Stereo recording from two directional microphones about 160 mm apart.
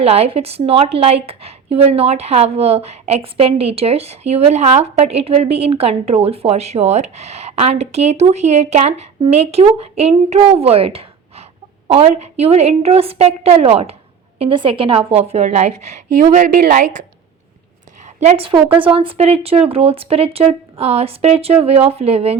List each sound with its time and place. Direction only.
0.0 s a woman's voice: 40° right (ahead or behind)
18.2 s a woman's voice: 40° right (ahead or behind)